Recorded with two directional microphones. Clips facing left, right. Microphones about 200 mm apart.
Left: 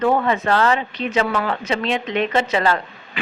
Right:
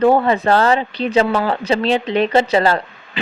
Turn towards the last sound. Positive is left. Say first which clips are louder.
# right 2 dB
turn(degrees=-35)  # may be behind; listen again after turning